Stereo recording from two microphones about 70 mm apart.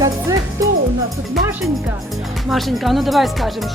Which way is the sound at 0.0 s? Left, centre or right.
Right.